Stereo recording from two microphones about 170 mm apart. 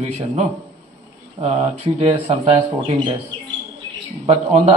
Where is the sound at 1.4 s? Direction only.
35° right (ahead or behind).